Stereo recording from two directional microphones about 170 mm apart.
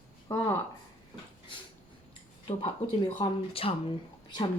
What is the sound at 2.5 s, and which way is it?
Speech, 30° left (ahead or behind).